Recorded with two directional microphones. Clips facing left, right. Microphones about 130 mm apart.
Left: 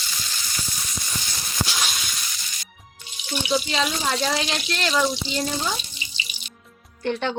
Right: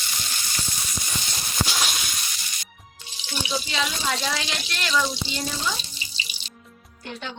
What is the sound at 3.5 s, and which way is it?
Speech, 30° left (ahead or behind).